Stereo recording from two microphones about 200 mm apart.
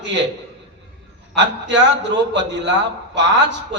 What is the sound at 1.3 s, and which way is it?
A man's voice, 60° right (ahead or behind).